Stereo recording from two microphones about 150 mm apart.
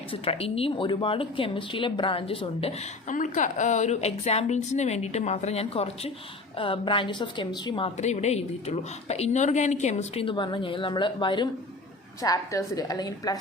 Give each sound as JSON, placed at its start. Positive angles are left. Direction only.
{"t": 0.1, "sound": "a woman's voice", "side_deg": 40}
{"t": 3.1, "sound": "a woman's voice", "side_deg": 55}
{"t": 7.9, "sound": "a woman's voice", "side_deg": 50}
{"t": 10.2, "sound": "a woman's voice", "side_deg": 35}